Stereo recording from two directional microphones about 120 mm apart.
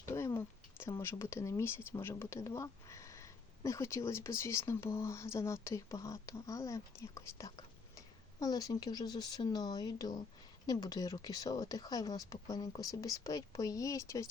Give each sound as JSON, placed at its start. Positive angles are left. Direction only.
{"t": 0.0, "sound": "speech", "side_deg": 25}